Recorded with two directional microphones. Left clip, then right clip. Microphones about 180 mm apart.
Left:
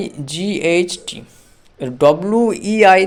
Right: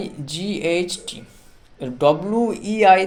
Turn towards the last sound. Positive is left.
turn(degrees=40)  # may be behind; listen again after turning